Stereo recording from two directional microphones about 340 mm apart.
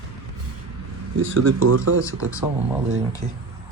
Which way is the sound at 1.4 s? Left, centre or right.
Right.